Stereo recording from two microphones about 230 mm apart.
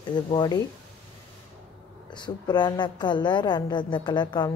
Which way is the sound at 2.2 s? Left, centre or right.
Centre.